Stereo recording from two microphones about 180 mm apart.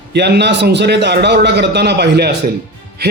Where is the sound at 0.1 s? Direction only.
70° right (ahead or behind).